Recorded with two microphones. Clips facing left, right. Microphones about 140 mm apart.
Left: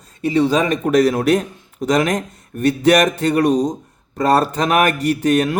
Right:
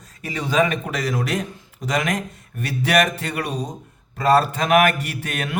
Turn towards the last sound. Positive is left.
turn(degrees=40)  # may be behind; listen again after turning